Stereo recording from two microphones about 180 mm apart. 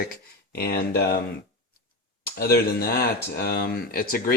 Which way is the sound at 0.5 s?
60° left (ahead or behind).